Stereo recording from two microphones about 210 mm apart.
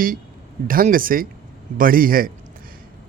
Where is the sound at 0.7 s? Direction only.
40° right (ahead or behind).